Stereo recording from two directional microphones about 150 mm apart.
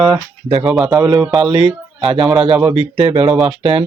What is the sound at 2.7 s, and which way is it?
Speech, 40° right (ahead or behind).